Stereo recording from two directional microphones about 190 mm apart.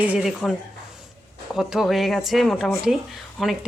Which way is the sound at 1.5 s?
Centre (ahead or behind).